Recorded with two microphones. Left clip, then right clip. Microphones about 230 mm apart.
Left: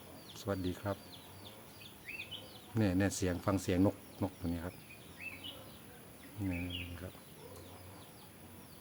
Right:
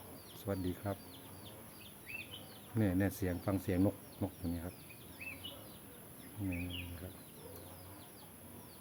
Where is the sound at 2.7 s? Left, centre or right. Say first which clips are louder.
Left 2 dB; centre.